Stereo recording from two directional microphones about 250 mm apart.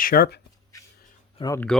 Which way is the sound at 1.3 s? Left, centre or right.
Centre.